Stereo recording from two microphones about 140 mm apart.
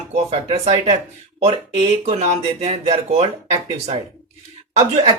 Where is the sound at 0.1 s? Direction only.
45° right (ahead or behind).